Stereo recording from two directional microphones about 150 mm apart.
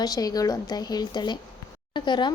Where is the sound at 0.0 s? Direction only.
25° left (ahead or behind).